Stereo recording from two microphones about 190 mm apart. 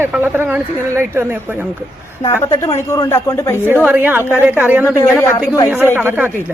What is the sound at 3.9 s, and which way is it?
Speech, 10° right (ahead or behind).